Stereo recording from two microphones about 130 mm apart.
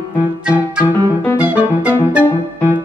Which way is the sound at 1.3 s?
10° right (ahead or behind).